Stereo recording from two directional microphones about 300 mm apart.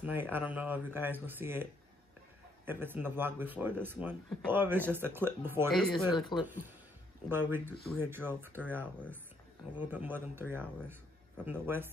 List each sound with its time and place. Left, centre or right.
0.0 s speech: centre
6.1 s speech: centre
7.2 s speech: centre
9.8 s speech: centre